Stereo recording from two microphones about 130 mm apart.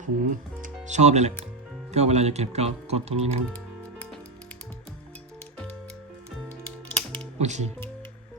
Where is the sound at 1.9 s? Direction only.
55° right (ahead or behind).